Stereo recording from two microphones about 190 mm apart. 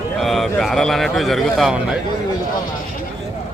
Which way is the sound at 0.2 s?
Centre (ahead or behind).